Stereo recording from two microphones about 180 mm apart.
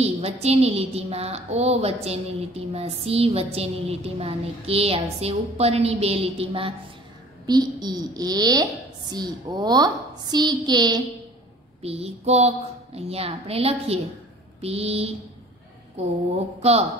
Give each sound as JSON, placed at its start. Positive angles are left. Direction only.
{"t": 0.0, "sound": "a woman's voice", "side_deg": -35}
{"t": 11.8, "sound": "a woman's voice", "side_deg": -35}